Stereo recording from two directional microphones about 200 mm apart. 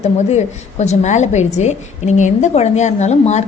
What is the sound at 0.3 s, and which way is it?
A woman's voice, 35° left (ahead or behind).